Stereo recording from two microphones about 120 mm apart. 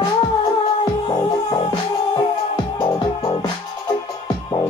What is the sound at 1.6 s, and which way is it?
Music, 40° left (ahead or behind).